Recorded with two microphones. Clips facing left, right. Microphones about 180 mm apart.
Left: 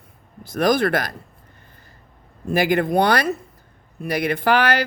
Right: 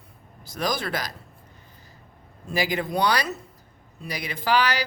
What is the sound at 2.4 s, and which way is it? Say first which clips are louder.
Speech: left 7 dB; 55° left (ahead or behind).